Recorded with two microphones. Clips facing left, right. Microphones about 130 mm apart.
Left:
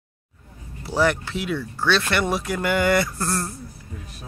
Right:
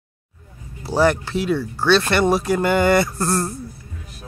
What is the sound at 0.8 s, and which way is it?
Speech, 35° right (ahead or behind).